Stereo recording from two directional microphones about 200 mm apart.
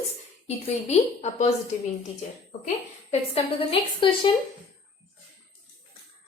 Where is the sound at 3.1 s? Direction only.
30° left (ahead or behind).